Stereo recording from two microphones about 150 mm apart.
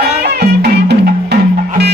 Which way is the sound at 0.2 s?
90° right.